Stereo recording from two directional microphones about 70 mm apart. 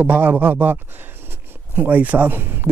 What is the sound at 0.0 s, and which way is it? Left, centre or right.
Speech, right.